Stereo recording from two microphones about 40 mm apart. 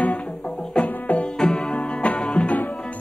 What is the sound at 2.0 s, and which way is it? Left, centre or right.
Music, left.